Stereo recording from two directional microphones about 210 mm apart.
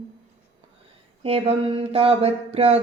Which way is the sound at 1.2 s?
25° right (ahead or behind).